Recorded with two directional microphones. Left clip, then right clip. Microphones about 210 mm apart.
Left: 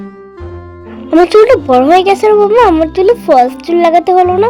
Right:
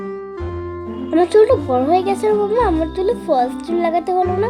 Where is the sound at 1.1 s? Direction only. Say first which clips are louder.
Left 7 dB; 30° left (ahead or behind).